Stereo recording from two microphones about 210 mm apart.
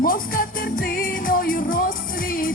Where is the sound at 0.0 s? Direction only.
45° left (ahead or behind).